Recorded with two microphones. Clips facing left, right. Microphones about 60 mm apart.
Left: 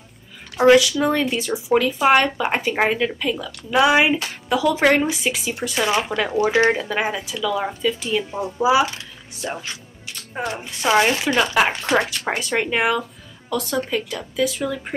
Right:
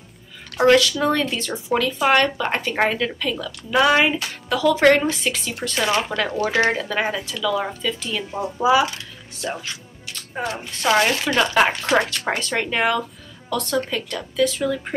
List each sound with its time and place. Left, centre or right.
0.6 s speech: centre
10.5 s speech: centre
11.3 s a woman's voice: centre